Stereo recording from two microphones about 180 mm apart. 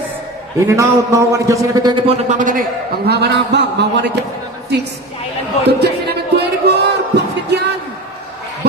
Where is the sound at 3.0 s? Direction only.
65° right (ahead or behind).